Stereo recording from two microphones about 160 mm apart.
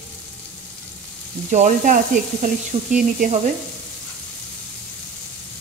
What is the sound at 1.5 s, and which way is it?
Speech, 50° right (ahead or behind).